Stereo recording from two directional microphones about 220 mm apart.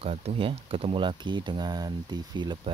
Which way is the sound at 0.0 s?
30° right (ahead or behind).